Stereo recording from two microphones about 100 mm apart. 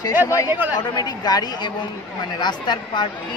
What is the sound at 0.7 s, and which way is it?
A woman's voice, 45° left (ahead or behind).